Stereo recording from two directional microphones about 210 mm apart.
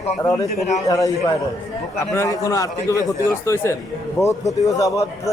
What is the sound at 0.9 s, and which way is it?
Speech, 15° left (ahead or behind).